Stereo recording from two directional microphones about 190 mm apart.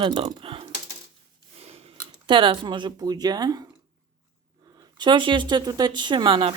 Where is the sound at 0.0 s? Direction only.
25° right (ahead or behind).